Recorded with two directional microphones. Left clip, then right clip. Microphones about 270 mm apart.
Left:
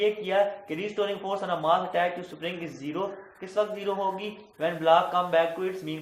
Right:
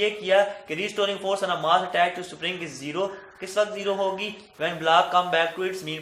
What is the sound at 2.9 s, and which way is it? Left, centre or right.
A man's voice, right.